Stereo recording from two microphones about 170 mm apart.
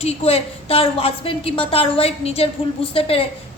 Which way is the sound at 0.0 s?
35° left (ahead or behind).